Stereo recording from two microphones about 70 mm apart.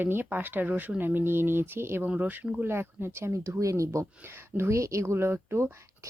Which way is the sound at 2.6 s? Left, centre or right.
Right.